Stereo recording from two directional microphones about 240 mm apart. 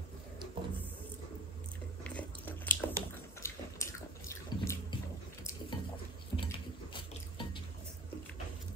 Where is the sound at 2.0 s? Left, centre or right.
Centre.